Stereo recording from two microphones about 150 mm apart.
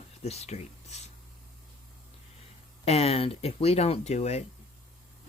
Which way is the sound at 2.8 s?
45° left (ahead or behind).